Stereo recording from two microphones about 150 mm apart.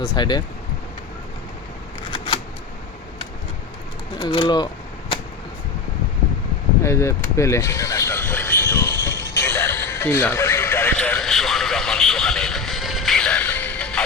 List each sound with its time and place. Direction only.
0.0 s speech: 25° left (ahead or behind)
4.2 s speech: 30° left (ahead or behind)
6.8 s vehicle: 20° left (ahead or behind)
10.9 s radio: 5° left (ahead or behind)